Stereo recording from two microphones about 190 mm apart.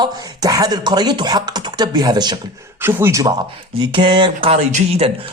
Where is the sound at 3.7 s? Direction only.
25° right (ahead or behind).